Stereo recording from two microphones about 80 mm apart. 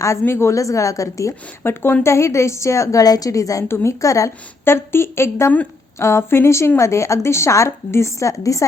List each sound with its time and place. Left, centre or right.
0.0 s a woman's voice: left
4.6 s speech: left